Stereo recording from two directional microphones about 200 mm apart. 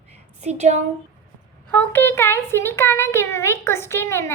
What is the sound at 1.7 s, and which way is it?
Speech, 10° left (ahead or behind).